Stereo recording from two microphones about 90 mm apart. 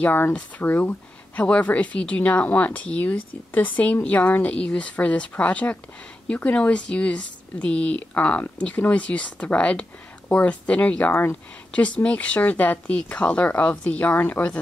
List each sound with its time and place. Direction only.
0.0 s speech: 20° left (ahead or behind)